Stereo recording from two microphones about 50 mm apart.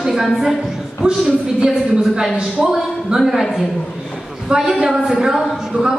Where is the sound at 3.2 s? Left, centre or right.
Centre.